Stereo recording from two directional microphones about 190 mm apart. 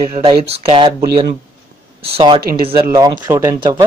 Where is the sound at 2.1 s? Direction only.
30° right (ahead or behind).